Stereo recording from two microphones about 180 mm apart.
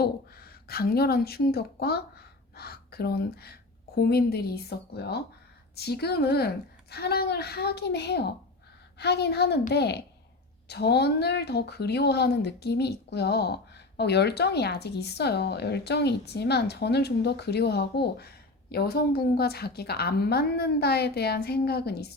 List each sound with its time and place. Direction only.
0.0 s speech: 60° left (ahead or behind)